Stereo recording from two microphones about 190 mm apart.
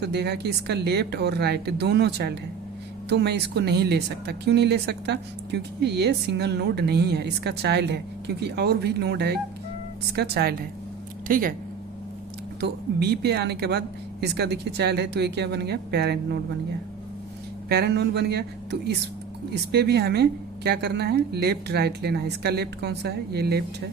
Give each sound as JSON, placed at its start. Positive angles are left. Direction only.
{"t": 0.0, "sound": "speech", "side_deg": -60}
{"t": 11.3, "sound": "speech", "side_deg": -50}
{"t": 12.5, "sound": "speech", "side_deg": -60}
{"t": 17.7, "sound": "speech", "side_deg": -60}